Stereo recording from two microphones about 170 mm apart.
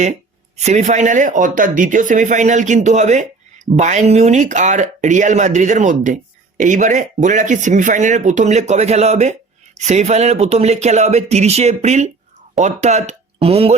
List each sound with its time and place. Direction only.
0.0 s speech: 45° right (ahead or behind)